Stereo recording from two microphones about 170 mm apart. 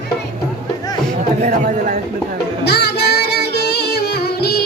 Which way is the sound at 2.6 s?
75° left (ahead or behind).